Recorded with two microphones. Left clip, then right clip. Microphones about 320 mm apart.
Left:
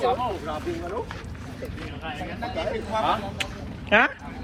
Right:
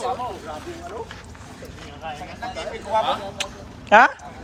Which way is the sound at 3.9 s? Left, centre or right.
Centre.